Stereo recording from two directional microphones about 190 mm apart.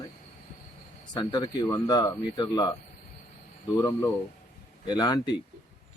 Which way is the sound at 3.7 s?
15° left (ahead or behind).